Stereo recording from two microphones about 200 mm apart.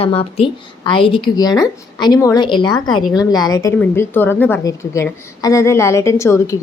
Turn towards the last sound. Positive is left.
turn(degrees=15)  # may be behind; listen again after turning